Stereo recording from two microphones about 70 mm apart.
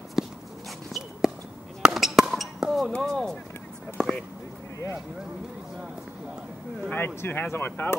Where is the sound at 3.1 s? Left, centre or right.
Centre.